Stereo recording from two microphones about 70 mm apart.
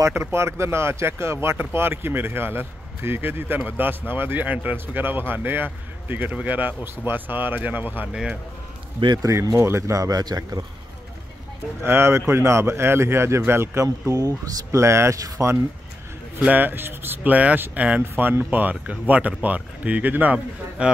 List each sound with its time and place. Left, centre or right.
0.0 s speech: right
9.0 s a man's voice: right
9.6 s speech: right
11.8 s speech: right
14.0 s speech: right
14.8 s speech: right
16.3 s speech: right